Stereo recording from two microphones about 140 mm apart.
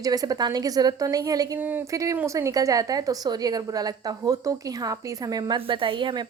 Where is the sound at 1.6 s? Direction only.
15° right (ahead or behind).